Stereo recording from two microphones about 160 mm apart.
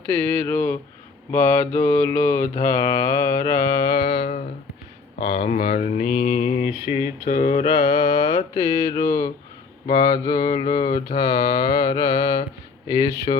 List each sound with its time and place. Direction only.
0.2 s mantra: 15° left (ahead or behind)
5.3 s mantra: 35° left (ahead or behind)